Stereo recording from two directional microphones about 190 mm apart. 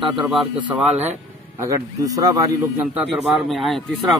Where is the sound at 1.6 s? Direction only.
15° right (ahead or behind).